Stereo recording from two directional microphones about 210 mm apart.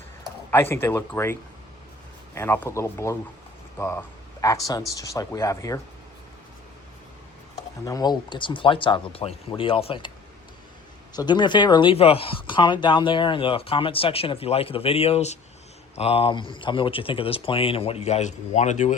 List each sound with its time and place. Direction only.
0.5 s speech: 10° left (ahead or behind)
7.9 s speech: 20° left (ahead or behind)
11.1 s speech: 20° left (ahead or behind)